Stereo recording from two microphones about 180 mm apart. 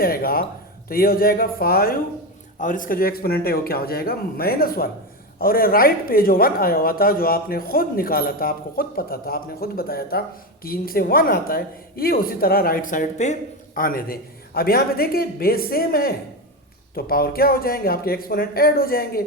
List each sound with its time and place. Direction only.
0.0 s speech: 55° left (ahead or behind)